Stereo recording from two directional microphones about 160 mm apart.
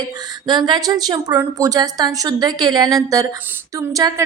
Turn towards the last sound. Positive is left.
turn(degrees=-20)  # may be behind; listen again after turning